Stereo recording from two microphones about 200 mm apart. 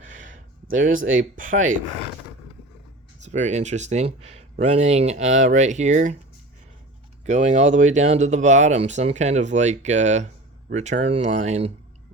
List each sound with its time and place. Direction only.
0.7 s speech: 40° right (ahead or behind)
3.2 s speech: 35° right (ahead or behind)
7.3 s speech: 35° right (ahead or behind)